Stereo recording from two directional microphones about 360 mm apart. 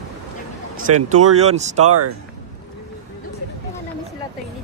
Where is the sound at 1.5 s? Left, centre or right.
Centre.